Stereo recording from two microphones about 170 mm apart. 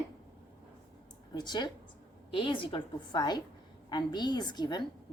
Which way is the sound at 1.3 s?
25° left (ahead or behind).